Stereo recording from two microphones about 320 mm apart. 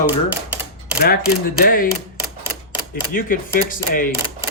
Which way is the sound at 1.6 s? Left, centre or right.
Left.